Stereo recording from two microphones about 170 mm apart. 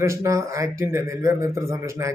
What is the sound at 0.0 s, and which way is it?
Speech, 20° right (ahead or behind).